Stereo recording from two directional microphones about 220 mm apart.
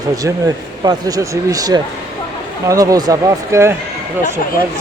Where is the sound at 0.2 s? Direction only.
15° right (ahead or behind).